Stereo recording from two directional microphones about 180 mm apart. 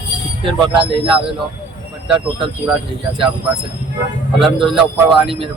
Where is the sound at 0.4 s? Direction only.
30° right (ahead or behind).